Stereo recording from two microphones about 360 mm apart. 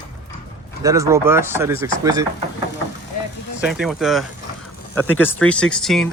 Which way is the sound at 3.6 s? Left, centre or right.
Centre.